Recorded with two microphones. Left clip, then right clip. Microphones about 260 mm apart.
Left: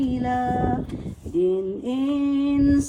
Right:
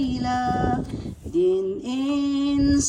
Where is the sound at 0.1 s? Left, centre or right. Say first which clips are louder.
Even; centre.